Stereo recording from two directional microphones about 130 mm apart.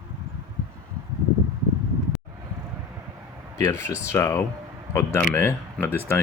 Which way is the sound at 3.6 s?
20° left (ahead or behind).